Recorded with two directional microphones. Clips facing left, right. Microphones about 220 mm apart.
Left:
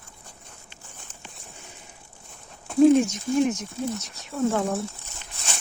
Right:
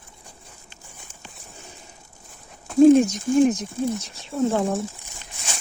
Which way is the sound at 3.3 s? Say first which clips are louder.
Right 5 dB; 50° right (ahead or behind).